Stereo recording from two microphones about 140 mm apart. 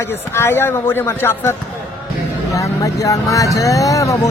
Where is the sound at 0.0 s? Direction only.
15° left (ahead or behind).